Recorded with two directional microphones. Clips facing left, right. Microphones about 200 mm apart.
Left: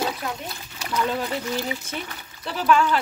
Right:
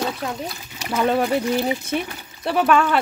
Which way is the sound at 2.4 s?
60° right (ahead or behind).